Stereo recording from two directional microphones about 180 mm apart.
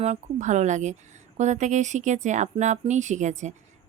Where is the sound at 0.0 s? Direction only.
40° right (ahead or behind).